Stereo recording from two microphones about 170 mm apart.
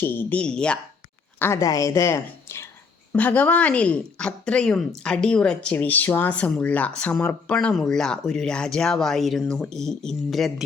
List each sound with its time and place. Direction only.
0.0 s speech: 10° left (ahead or behind)
1.4 s speech: 15° left (ahead or behind); by 10.5 s centre (ahead or behind)